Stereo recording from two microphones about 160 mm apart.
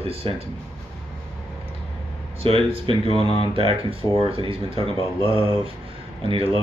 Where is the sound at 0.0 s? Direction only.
35° right (ahead or behind).